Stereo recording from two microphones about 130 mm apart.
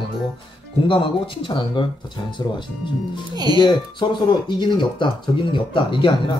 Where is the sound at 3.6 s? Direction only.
35° left (ahead or behind).